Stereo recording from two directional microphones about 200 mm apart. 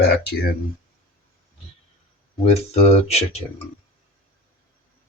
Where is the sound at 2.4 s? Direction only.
30° left (ahead or behind).